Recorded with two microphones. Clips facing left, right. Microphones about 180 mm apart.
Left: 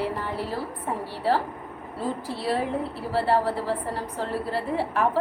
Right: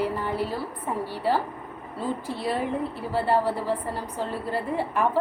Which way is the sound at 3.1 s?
Centre (ahead or behind).